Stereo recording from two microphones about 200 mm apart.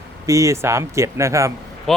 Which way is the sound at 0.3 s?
15° right (ahead or behind).